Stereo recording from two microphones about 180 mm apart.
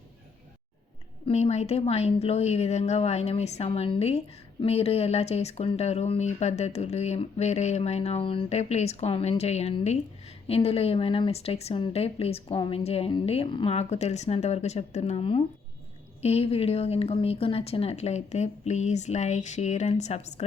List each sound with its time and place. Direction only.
1.2 s speech: 35° left (ahead or behind)